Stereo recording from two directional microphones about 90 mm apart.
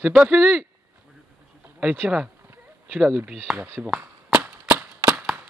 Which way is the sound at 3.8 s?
10° right (ahead or behind).